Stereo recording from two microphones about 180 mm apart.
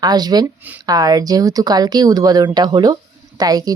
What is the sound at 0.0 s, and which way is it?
Speech, 20° right (ahead or behind).